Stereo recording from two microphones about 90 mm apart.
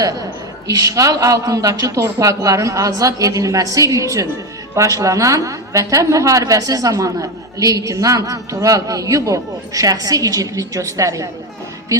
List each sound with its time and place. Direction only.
0.7 s a man's voice: 40° right (ahead or behind)